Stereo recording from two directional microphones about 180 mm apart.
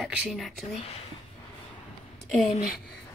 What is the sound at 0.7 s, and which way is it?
Speech, 35° left (ahead or behind).